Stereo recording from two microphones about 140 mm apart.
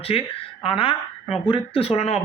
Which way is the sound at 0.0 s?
40° left (ahead or behind).